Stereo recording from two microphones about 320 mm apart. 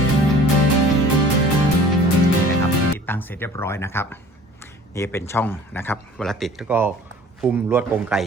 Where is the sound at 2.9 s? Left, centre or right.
Centre.